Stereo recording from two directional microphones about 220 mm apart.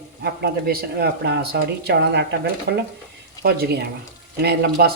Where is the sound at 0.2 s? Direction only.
45° right (ahead or behind).